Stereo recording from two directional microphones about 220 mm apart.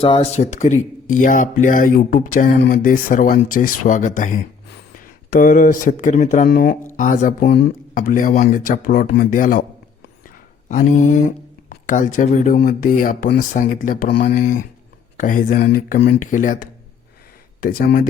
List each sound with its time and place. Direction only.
0.0 s speech: 25° left (ahead or behind)